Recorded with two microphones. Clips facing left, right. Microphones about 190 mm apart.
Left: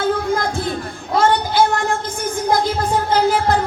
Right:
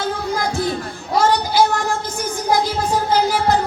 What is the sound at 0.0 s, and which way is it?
Music, 55° left (ahead or behind).